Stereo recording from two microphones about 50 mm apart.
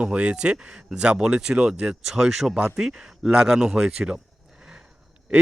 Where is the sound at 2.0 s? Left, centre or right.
Centre.